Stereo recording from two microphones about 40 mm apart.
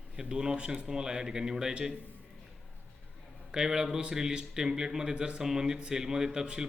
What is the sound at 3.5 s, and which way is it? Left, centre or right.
Speech, centre.